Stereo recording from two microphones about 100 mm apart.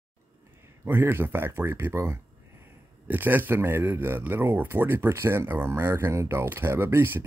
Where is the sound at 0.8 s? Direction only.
20° right (ahead or behind).